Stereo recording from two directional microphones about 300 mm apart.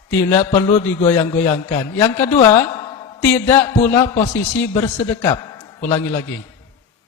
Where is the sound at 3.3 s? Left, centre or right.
Centre.